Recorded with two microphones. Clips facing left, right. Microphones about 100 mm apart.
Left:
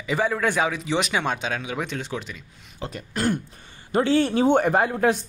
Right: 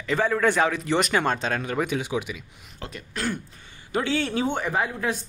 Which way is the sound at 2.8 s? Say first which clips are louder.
Left 5 dB; 40° left (ahead or behind).